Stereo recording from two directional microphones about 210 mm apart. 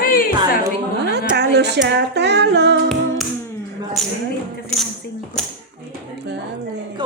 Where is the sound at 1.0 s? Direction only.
50° right (ahead or behind).